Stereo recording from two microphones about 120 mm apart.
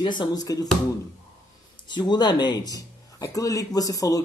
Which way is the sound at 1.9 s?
40° left (ahead or behind).